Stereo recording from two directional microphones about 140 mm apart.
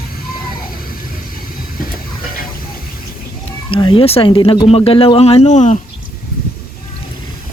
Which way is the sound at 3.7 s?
35° left (ahead or behind).